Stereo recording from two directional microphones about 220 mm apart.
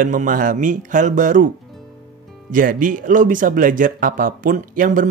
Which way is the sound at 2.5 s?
40° right (ahead or behind).